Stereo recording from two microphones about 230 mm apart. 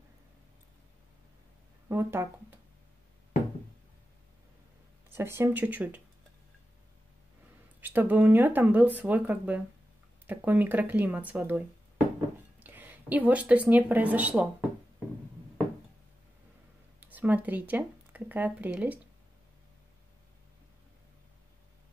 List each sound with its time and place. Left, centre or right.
1.9 s speech: centre
5.1 s speech: centre
7.8 s speech: centre
17.0 s speech: centre